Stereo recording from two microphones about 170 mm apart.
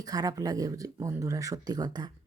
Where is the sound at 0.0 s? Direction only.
20° right (ahead or behind).